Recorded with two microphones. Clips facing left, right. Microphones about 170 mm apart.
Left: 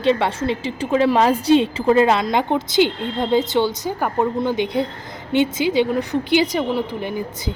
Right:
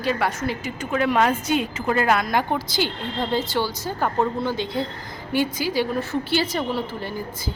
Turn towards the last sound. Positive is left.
turn(degrees=20)  # may be behind; listen again after turning